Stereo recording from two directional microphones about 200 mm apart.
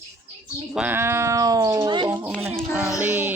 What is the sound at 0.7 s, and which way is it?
Speech, 10° right (ahead or behind).